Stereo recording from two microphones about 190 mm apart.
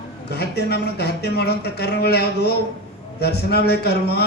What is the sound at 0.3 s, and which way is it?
A man's voice, 60° left (ahead or behind).